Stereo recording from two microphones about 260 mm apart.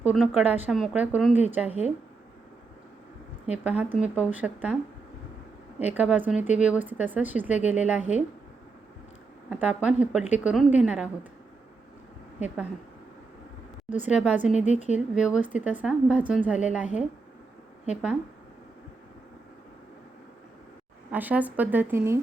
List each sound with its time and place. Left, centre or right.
0.0 s a woman's voice: centre
3.5 s a woman's voice: centre
5.8 s a woman's voice: centre
9.5 s a woman's voice: centre
14.0 s a woman's voice: centre
14.7 s speech: left
14.9 s a woman's voice: centre
21.1 s speech: centre